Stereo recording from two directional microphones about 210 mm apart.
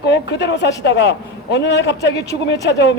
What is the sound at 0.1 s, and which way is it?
A man's voice, 55° left (ahead or behind).